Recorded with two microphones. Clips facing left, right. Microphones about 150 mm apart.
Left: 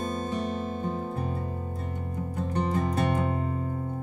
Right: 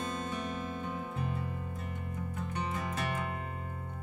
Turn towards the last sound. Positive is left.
turn(degrees=35)  # may be behind; listen again after turning